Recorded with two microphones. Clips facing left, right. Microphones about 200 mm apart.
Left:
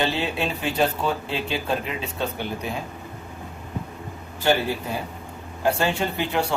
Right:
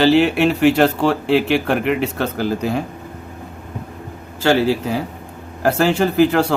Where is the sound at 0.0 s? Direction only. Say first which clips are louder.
Right 11 dB; 85° right.